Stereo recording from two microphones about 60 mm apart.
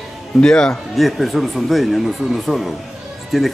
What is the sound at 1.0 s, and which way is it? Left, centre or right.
Speech, centre.